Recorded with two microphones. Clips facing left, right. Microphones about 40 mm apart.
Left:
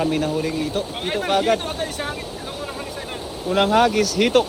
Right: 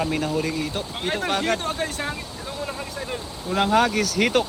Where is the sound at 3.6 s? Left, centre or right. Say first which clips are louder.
Left 2 dB; centre.